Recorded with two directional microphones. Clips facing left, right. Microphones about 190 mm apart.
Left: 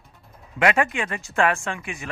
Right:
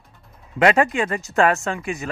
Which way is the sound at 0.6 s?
35° right (ahead or behind).